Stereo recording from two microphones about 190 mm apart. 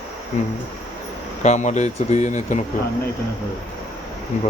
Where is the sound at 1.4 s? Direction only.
40° left (ahead or behind).